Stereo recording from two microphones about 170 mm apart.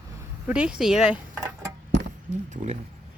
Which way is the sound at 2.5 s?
45° right (ahead or behind).